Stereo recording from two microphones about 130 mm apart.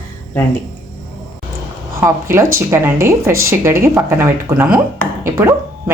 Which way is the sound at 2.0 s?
20° right (ahead or behind).